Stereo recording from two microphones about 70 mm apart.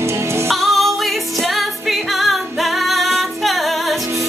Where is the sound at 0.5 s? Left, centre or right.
Centre.